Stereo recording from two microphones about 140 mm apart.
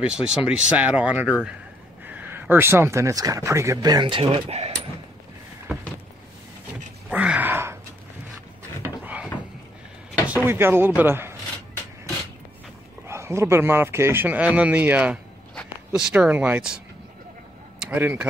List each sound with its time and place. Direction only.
0.0 s a man's voice: 5° right (ahead or behind); by 4.7 s 50° right (ahead or behind)
7.1 s wail: 10° right (ahead or behind)
8.8 s a sound: 10° right (ahead or behind)
10.2 s speech: 15° right (ahead or behind)
13.0 s a man's voice: 20° right (ahead or behind)
17.7 s a sound: 15° right (ahead or behind)